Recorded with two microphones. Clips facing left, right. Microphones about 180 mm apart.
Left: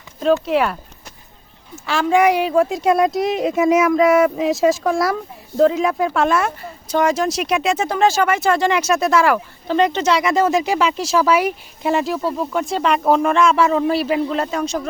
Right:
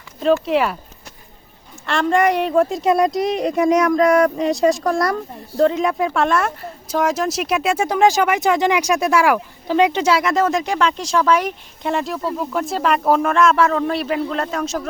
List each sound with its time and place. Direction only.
0.4 s speech: centre (ahead or behind)
1.9 s speech: centre (ahead or behind)